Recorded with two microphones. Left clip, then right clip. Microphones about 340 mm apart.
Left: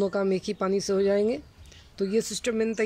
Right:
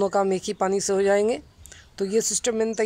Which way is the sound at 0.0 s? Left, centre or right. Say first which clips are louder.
Right 4 dB; centre.